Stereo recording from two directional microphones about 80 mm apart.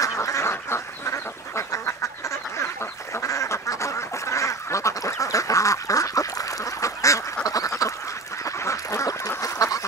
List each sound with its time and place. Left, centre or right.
0.0 s duck: left
3.2 s duck: left
9.4 s fowl: left